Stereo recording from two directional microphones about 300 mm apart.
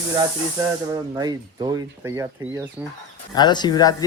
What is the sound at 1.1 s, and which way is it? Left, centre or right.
Speech, centre.